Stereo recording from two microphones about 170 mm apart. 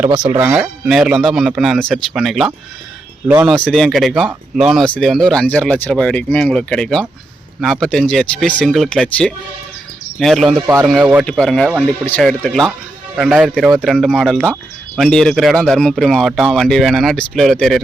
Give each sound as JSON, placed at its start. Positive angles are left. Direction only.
{"t": 0.3, "sound": "speech", "side_deg": -10}
{"t": 3.5, "sound": "speech", "side_deg": 5}